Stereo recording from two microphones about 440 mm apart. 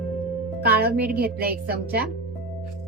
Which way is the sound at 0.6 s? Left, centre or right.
Right.